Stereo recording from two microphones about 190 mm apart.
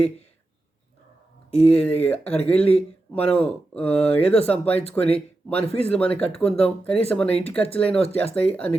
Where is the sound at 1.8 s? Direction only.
10° left (ahead or behind).